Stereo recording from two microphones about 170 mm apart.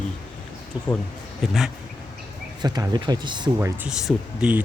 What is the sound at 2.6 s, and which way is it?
Speech, 25° right (ahead or behind).